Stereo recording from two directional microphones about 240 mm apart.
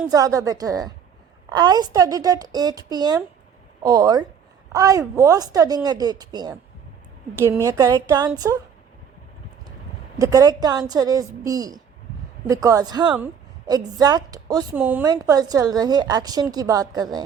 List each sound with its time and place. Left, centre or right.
0.1 s a woman's voice: centre
10.2 s a woman's voice: centre